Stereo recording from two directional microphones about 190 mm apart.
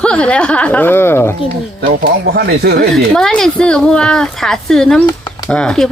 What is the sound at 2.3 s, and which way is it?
Speech, 60° right (ahead or behind).